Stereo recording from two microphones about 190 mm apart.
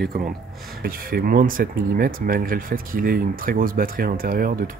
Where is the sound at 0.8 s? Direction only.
50° right (ahead or behind).